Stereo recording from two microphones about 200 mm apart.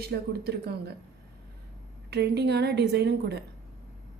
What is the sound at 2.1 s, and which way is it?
A woman's voice, 55° right (ahead or behind).